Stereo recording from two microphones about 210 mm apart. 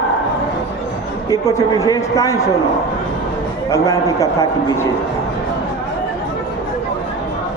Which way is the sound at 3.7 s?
15° left (ahead or behind).